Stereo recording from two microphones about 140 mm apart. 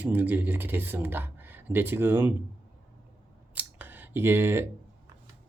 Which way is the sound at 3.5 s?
15° right (ahead or behind).